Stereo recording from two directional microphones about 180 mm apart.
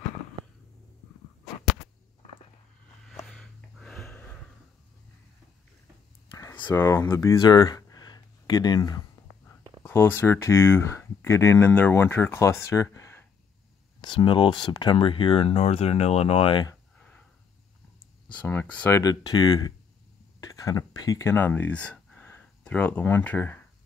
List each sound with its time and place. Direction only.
1.4 s whip: centre (ahead or behind)
3.3 s gasp: centre (ahead or behind)
6.3 s speech: 20° left (ahead or behind)
14.0 s speech: 25° left (ahead or behind)
18.3 s speech: 10° left (ahead or behind)